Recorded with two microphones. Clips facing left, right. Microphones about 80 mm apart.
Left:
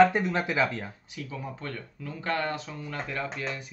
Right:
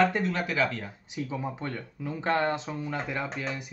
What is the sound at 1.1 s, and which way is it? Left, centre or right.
Speech, right.